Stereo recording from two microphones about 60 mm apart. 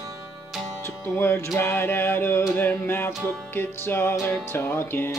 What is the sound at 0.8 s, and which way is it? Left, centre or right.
Speech, left.